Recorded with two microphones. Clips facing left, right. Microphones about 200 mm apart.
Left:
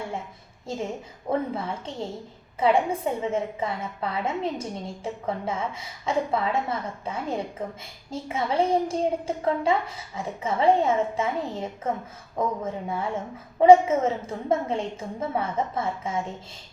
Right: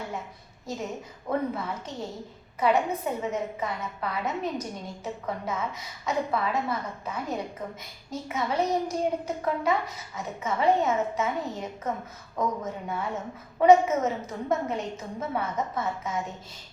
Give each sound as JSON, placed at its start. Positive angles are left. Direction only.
{"t": 0.7, "sound": "a woman's voice", "side_deg": 30}